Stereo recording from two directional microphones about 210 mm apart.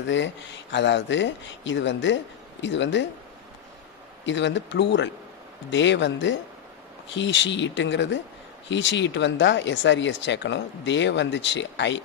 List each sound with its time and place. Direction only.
0.0 s speech: 60° left (ahead or behind)
4.3 s speech: 60° left (ahead or behind)